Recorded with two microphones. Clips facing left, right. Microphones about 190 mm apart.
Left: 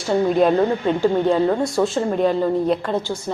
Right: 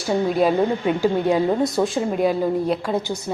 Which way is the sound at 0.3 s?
10° right (ahead or behind).